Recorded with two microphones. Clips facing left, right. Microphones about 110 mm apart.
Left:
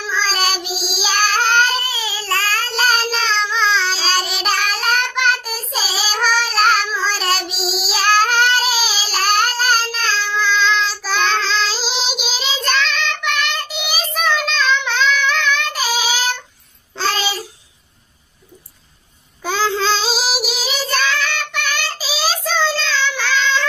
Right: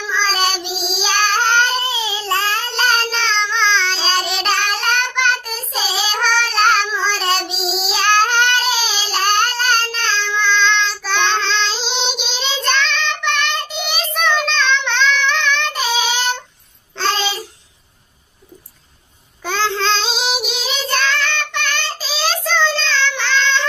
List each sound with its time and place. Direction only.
0.0 s child singing: centre (ahead or behind)
1.8 s babbling: 20° right (ahead or behind)
2.7 s child singing: 5° left (ahead or behind)
17.0 s babbling: 5° left (ahead or behind)
19.4 s child singing: 5° left (ahead or behind)